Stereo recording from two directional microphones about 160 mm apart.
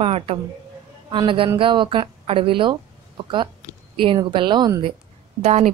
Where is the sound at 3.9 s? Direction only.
30° right (ahead or behind).